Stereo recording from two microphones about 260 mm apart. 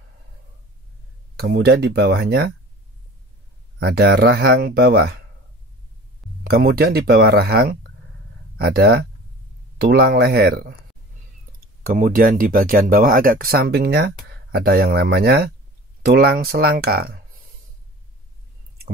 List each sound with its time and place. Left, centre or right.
1.4 s speech: right
3.8 s speech: right
6.4 s speech: right
11.8 s speech: right